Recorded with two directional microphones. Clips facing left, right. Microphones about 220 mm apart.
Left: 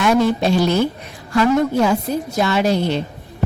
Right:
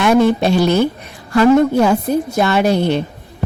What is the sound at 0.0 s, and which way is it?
A woman's voice, 60° right (ahead or behind).